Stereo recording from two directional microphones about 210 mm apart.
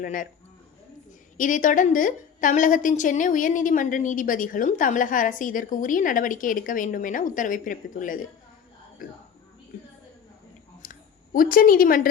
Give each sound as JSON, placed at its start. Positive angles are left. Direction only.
{"t": 0.0, "sound": "a woman's voice", "side_deg": 40}
{"t": 1.4, "sound": "a woman's voice", "side_deg": 40}
{"t": 10.8, "sound": "a sound", "side_deg": 40}